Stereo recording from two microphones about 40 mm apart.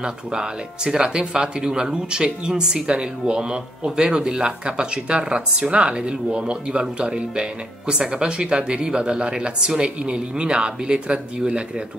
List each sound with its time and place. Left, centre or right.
0.0 s speech: right